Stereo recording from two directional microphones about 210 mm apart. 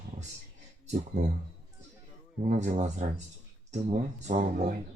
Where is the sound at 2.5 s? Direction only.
35° right (ahead or behind).